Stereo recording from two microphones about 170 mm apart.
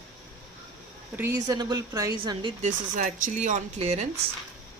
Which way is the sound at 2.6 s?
45° right (ahead or behind).